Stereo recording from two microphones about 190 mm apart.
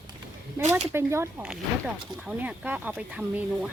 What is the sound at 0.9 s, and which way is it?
Speech, 15° right (ahead or behind).